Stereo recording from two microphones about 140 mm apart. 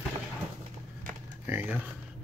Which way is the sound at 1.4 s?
15° right (ahead or behind).